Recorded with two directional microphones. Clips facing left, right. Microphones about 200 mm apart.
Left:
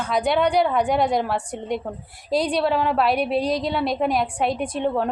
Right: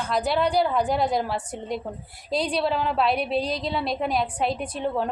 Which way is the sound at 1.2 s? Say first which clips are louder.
Left 3 dB; 5° right (ahead or behind).